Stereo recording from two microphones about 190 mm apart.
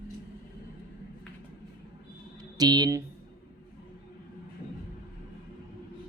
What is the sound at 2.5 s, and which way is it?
Speech, 20° right (ahead or behind).